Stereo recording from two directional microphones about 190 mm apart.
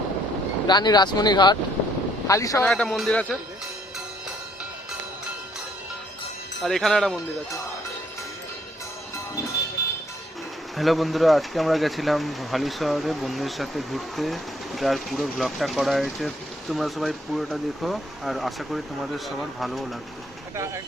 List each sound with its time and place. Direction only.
0.7 s speech: 20° left (ahead or behind)
2.6 s speech: 5° left (ahead or behind)
6.6 s speech: centre (ahead or behind)
10.8 s speech: centre (ahead or behind)